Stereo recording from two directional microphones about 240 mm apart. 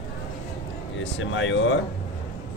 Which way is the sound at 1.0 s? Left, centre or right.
Left.